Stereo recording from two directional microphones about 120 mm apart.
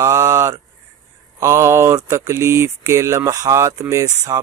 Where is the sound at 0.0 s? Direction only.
25° right (ahead or behind).